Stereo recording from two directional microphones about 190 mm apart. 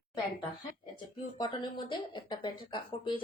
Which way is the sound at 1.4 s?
25° left (ahead or behind).